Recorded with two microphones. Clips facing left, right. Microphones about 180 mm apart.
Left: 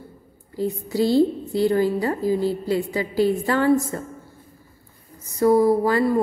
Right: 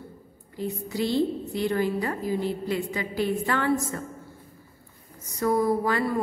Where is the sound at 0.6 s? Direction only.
35° left (ahead or behind).